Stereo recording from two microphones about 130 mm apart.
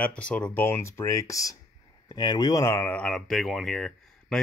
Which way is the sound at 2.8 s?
10° left (ahead or behind).